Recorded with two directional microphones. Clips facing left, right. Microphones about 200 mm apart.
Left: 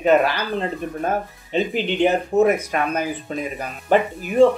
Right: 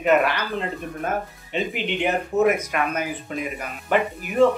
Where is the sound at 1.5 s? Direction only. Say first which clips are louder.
Left 5 dB; 30° left (ahead or behind).